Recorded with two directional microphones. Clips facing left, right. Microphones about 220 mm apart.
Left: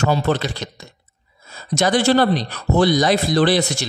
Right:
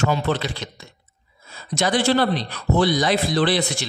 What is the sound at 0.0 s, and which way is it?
Speech, 45° left (ahead or behind).